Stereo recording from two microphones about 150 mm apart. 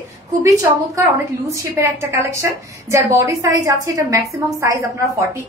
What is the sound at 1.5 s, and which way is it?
A woman's voice, 20° right (ahead or behind).